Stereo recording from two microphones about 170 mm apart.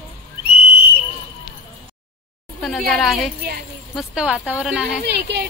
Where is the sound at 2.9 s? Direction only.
Centre (ahead or behind).